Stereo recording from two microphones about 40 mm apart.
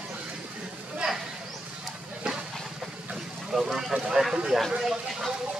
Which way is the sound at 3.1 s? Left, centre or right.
Centre.